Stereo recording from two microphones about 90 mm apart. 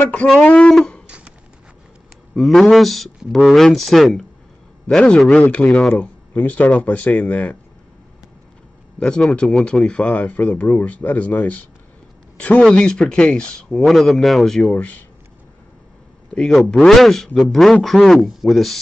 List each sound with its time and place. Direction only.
0.0 s speech: 15° left (ahead or behind)
1.0 s a sound: 15° right (ahead or behind)
2.3 s speech: centre (ahead or behind)
5.9 s speech: 20° left (ahead or behind)
9.0 s speech: 10° left (ahead or behind)
9.8 s speech: 15° left (ahead or behind)
14.7 s speech: 15° left (ahead or behind)
16.3 s speech: centre (ahead or behind)